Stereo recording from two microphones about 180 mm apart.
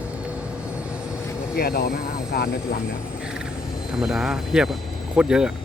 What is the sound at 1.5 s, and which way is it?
Speech, 60° left (ahead or behind).